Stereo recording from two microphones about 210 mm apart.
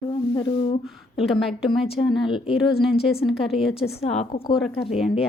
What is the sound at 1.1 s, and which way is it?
Speech, centre (ahead or behind).